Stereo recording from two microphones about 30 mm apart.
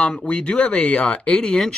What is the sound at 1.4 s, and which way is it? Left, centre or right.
Speech, left.